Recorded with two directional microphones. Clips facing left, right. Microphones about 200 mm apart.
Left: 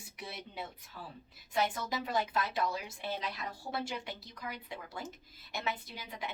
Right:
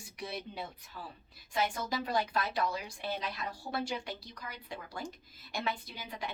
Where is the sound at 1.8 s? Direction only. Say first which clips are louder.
Right 1 dB; 20° left (ahead or behind).